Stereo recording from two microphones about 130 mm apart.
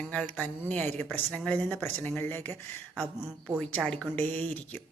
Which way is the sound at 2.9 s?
5° right (ahead or behind).